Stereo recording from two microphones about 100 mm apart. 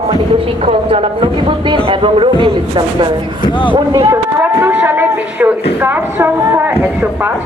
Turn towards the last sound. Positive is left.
turn(degrees=-25)  # may be behind; listen again after turning